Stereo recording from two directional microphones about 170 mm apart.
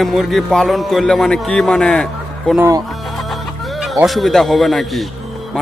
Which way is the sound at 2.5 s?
15° right (ahead or behind).